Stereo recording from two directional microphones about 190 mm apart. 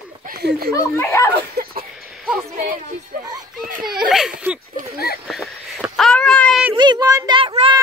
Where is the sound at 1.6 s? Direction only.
50° right (ahead or behind).